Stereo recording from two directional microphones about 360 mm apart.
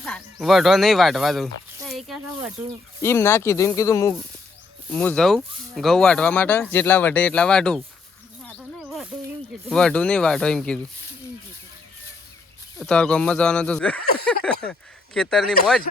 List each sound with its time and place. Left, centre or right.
0.0 s speech: centre
8.4 s snake: centre
9.6 s speech: centre
12.8 s speech: centre
14.0 s speech: left
14.3 s speech: centre